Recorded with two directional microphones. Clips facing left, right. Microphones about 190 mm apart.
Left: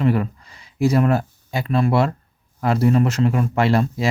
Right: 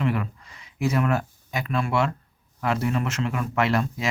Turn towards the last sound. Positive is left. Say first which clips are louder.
# left 5 dB
turn(degrees=35)  # may be behind; listen again after turning